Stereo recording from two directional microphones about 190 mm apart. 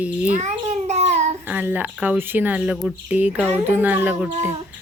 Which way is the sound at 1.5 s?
10° right (ahead or behind).